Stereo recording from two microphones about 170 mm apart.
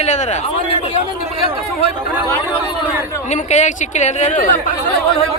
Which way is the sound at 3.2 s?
45° left (ahead or behind).